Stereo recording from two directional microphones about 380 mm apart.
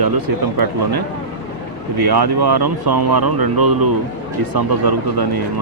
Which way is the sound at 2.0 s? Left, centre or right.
Right.